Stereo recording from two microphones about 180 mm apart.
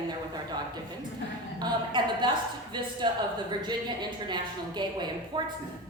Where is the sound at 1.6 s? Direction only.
25° right (ahead or behind).